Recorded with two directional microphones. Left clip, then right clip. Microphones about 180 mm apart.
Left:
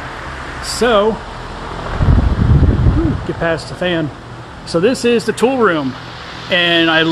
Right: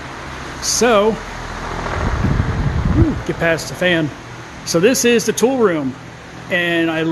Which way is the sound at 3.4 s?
5° right (ahead or behind).